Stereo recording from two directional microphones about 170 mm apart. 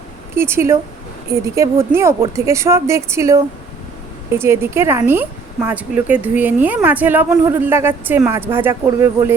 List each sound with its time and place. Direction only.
0.3 s speech: 15° right (ahead or behind)